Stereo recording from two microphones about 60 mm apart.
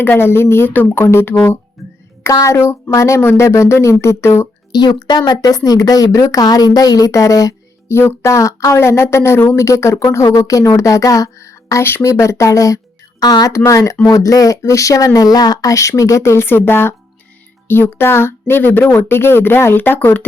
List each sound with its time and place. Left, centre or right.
0.0 s speech: left
0.7 s speech: left
1.0 s speech: left
1.8 s music: centre
2.5 s speech: left
2.9 s speech: left
3.2 s speech: left
3.4 s speech: left
4.9 s speech: left
7.9 s speech: left
9.6 s speech: left
10.3 s a woman's voice: left
13.5 s speech: left
16.4 s speech: left